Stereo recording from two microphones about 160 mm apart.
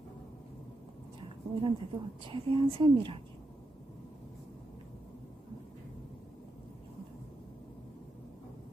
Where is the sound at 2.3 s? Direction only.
35° right (ahead or behind).